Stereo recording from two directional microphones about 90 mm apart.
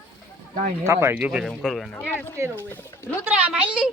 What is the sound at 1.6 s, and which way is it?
Speech, centre (ahead or behind).